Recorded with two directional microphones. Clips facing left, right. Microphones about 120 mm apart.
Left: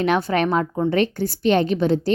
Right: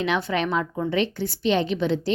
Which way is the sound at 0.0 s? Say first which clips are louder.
Left 5 dB; 45° left (ahead or behind).